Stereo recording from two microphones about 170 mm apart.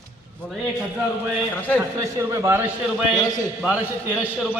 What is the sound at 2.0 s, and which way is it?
Speech, 15° right (ahead or behind).